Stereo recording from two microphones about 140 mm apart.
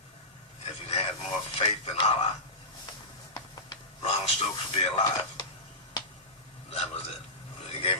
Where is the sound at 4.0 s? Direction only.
45° left (ahead or behind).